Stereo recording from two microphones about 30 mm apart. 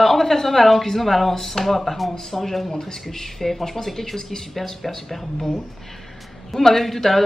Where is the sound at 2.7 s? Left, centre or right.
Left.